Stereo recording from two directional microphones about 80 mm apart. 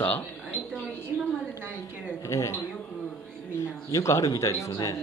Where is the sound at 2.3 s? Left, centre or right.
Left.